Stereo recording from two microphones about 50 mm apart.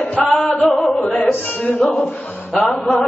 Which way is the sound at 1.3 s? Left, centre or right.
Left.